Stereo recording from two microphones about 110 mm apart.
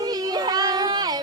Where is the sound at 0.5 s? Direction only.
35° right (ahead or behind).